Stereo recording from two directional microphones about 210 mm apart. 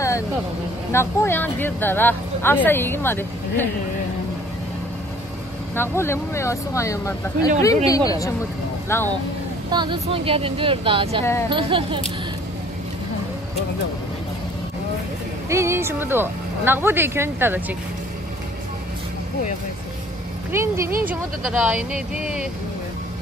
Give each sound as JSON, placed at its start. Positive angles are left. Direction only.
{"t": 0.9, "sound": "speech", "side_deg": 10}
{"t": 5.8, "sound": "speech", "side_deg": 10}
{"t": 9.7, "sound": "speech", "side_deg": -20}
{"t": 15.5, "sound": "speech", "side_deg": -15}
{"t": 20.5, "sound": "speech", "side_deg": -15}